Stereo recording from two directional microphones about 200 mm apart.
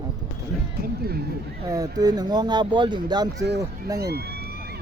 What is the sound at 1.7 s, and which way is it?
Speech, 20° right (ahead or behind).